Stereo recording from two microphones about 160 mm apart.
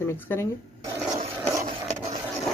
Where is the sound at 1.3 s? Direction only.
15° right (ahead or behind).